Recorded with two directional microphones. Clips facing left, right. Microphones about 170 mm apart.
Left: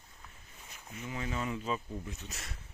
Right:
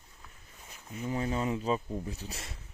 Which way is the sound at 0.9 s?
35° right (ahead or behind).